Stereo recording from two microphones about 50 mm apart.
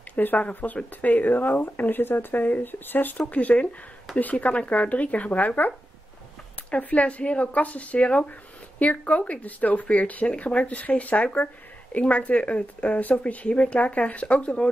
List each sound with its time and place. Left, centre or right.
0.1 s a woman's voice: left
6.7 s a woman's voice: left